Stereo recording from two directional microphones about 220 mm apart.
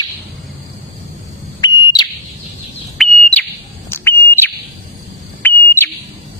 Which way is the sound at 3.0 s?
5° left (ahead or behind).